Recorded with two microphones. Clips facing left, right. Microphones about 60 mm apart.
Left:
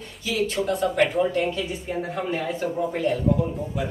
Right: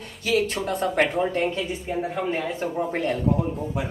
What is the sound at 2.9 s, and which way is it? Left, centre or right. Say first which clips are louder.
Speech: left 1 dB; right.